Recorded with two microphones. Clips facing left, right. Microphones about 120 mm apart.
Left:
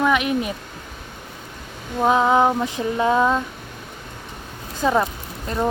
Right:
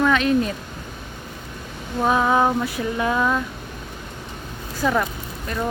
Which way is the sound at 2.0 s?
20° left (ahead or behind).